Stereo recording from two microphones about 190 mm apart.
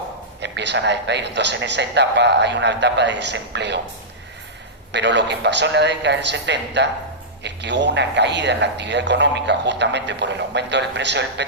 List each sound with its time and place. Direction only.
0.4 s a man's voice: 65° right (ahead or behind)
4.9 s a man's voice: 65° right (ahead or behind)